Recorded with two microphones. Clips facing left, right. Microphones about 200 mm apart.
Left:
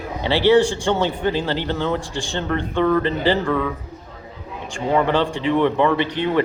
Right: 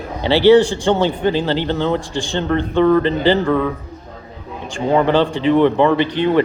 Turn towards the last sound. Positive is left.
turn(degrees=-30)  # may be behind; listen again after turning